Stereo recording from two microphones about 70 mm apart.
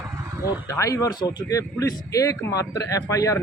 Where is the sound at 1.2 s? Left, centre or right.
Left.